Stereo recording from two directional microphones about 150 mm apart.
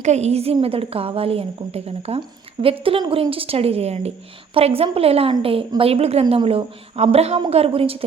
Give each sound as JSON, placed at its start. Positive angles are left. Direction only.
{"t": 0.0, "sound": "a woman's voice", "side_deg": -45}